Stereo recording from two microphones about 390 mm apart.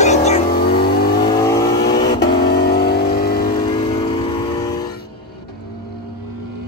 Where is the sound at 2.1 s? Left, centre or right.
Left.